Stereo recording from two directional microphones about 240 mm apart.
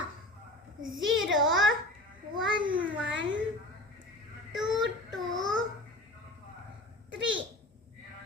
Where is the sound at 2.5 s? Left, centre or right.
Right.